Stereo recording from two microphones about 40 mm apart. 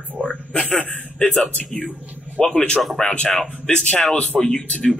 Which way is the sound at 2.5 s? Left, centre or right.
Left.